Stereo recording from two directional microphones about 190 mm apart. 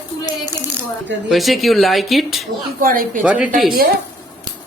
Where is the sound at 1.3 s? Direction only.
Centre (ahead or behind).